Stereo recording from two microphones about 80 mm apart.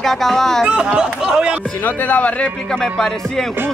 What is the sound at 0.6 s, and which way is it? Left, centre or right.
Speech, centre.